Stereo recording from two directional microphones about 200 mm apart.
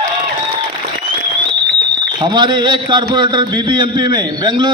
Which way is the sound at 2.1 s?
20° right (ahead or behind).